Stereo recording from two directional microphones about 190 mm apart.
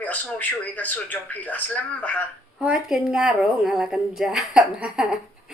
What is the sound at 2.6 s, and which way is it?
A man's voice, 5° right (ahead or behind).